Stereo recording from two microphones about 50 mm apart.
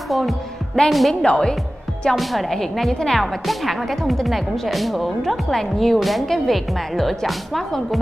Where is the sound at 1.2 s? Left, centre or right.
Left.